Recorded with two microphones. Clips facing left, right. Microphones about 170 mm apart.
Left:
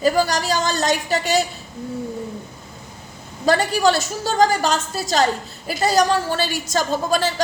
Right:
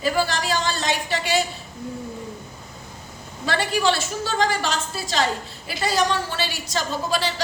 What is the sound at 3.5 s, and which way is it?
A woman's voice, 40° left (ahead or behind).